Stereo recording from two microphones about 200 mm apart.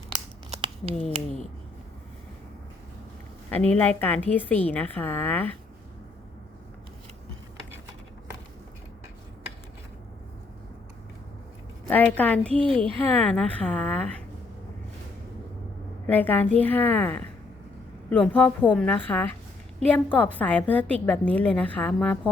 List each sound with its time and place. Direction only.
0.5 s crumpling: 30° right (ahead or behind)
3.5 s a woman's voice: 10° left (ahead or behind)
11.9 s a woman's voice: 10° left (ahead or behind)
16.0 s a woman's voice: 10° left (ahead or behind)